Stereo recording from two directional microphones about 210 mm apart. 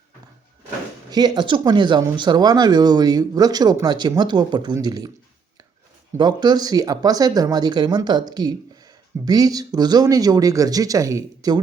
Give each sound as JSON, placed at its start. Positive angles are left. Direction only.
{"t": 1.1, "sound": "speech", "side_deg": -20}
{"t": 6.1, "sound": "speech", "side_deg": -20}